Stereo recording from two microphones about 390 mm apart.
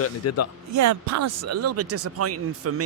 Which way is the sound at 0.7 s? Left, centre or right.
Right.